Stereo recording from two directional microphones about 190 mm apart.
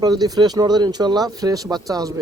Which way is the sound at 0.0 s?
20° right (ahead or behind).